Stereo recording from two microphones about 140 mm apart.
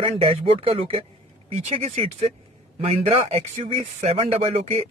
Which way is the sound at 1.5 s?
50° right (ahead or behind).